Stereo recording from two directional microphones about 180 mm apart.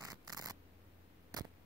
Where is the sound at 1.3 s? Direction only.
20° right (ahead or behind).